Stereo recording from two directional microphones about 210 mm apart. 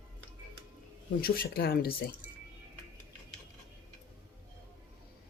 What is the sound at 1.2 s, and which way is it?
Speech, 45° left (ahead or behind).